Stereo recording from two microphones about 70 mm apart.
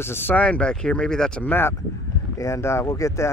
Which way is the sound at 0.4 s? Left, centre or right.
Centre.